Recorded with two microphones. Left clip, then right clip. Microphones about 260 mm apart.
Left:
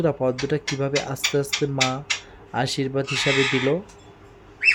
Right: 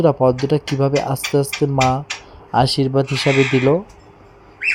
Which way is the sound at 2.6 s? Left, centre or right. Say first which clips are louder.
Right 8 dB; right.